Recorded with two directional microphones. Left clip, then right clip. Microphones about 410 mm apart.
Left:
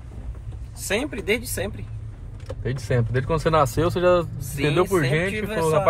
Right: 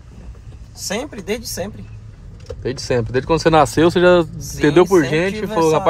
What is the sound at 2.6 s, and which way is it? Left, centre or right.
Speech, right.